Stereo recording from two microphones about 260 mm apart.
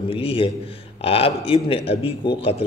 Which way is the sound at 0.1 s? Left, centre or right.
Left.